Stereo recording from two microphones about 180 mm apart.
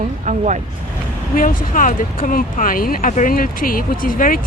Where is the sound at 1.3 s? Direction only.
45° left (ahead or behind).